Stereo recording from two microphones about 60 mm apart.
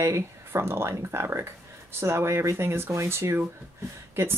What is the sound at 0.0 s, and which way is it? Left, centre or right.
Speech, right.